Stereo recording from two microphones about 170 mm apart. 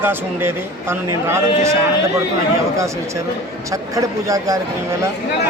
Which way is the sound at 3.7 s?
20° right (ahead or behind).